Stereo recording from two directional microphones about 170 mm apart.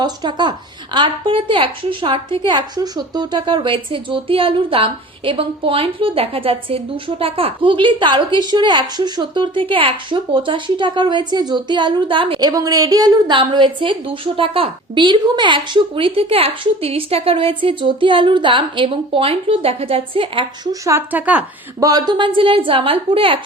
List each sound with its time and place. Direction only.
0.0 s a woman's voice: 25° right (ahead or behind)
20.8 s speech: 15° right (ahead or behind)
21.8 s a woman's voice: 20° right (ahead or behind)